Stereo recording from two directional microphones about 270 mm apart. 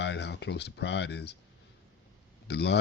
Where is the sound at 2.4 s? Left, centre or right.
Left.